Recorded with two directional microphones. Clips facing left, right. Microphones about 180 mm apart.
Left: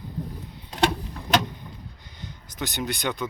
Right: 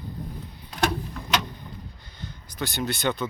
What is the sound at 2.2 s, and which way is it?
Speech, 20° left (ahead or behind).